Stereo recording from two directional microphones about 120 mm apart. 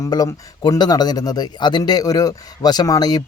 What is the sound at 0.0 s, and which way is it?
A man's voice, 35° left (ahead or behind).